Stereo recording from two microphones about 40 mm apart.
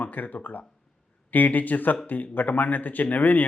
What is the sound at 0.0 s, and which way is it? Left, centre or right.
Speech, left.